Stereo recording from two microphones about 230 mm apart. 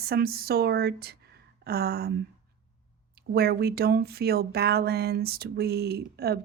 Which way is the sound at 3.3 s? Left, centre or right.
Right.